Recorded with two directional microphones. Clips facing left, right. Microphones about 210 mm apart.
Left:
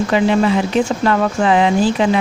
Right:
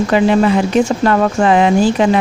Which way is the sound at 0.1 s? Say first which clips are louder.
Right 3 dB; 50° right (ahead or behind).